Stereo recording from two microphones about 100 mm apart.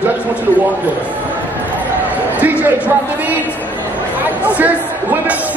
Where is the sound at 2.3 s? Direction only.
15° right (ahead or behind).